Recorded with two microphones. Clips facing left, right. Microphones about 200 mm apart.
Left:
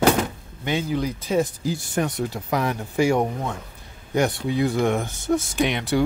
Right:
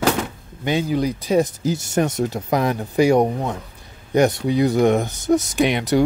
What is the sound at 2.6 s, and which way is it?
Speech, 15° right (ahead or behind).